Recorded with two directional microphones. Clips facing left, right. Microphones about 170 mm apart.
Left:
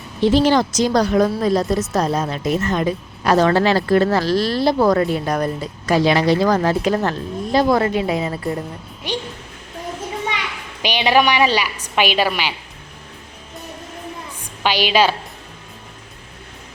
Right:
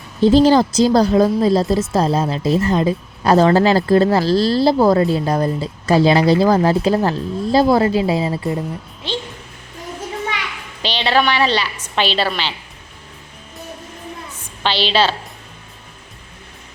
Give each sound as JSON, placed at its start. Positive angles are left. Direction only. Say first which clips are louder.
{"t": 0.4, "sound": "speech", "louder": "right 4 dB", "side_deg": -35}
{"t": 9.0, "sound": "a woman's voice", "louder": "even", "side_deg": 15}
{"t": 10.8, "sound": "a woman's voice", "louder": "left 1 dB", "side_deg": 10}
{"t": 14.6, "sound": "a woman's voice", "louder": "left 1 dB", "side_deg": 10}